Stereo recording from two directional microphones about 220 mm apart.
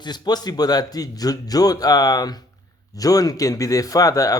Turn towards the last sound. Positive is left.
turn(degrees=15)  # may be behind; listen again after turning